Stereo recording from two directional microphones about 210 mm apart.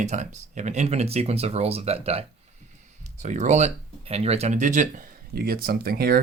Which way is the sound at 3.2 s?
35° right (ahead or behind).